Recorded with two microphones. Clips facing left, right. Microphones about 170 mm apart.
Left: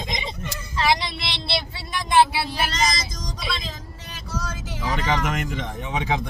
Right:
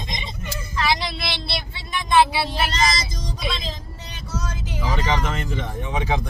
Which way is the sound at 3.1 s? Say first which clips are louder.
Right 2 dB; 30° right (ahead or behind).